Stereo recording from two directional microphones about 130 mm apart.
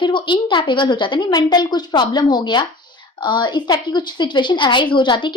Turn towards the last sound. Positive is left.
turn(degrees=35)  # may be behind; listen again after turning